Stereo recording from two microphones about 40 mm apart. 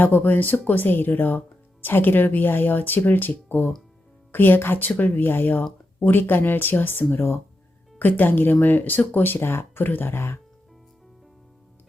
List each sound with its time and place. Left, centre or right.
0.0 s speech: left
4.9 s speech: left
7.9 s speech: left
9.8 s speech: left